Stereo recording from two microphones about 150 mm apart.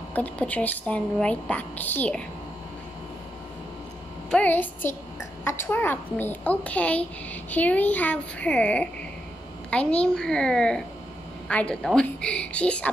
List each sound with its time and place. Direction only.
0.1 s a woman's voice: 10° left (ahead or behind)
4.3 s a woman's voice: 10° left (ahead or behind)